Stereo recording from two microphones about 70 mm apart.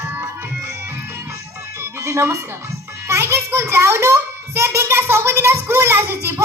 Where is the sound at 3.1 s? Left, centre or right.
Right.